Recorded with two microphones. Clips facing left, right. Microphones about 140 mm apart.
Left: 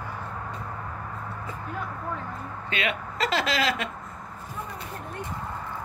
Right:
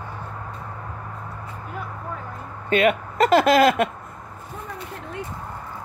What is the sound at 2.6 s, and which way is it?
Speech, 50° right (ahead or behind).